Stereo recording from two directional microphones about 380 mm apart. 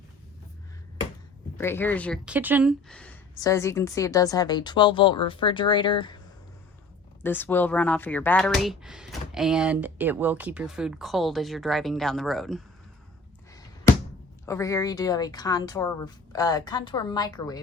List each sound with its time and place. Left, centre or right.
1.5 s speech: centre
13.5 s thunk: centre
14.4 s speech: centre